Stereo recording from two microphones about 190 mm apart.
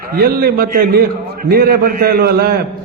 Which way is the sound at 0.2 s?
55° right (ahead or behind).